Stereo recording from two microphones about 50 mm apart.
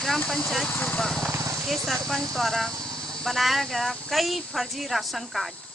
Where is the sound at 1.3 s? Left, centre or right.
Right.